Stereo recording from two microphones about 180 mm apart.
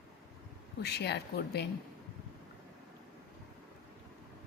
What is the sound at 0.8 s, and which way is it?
Speech, 65° left (ahead or behind).